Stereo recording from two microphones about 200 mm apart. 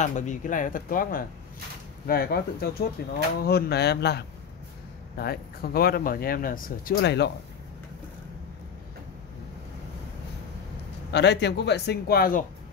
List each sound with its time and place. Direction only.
0.0 s a man's voice: 35° left (ahead or behind); by 7.2 s 60° left (ahead or behind)
11.1 s a man's voice: 60° left (ahead or behind)